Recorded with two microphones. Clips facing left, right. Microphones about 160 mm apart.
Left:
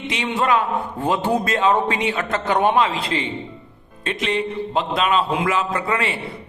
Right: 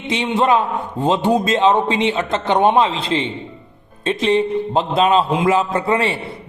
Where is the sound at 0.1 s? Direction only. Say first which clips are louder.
Right 4 dB; 25° right (ahead or behind).